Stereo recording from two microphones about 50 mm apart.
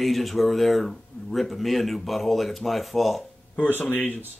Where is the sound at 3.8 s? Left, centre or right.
Left.